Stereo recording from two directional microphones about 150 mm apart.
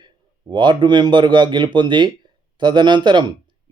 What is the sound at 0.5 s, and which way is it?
Speech, 30° right (ahead or behind).